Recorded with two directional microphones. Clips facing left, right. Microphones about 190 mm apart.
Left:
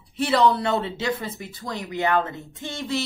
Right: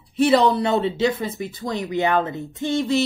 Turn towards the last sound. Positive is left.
turn(degrees=-20)  # may be behind; listen again after turning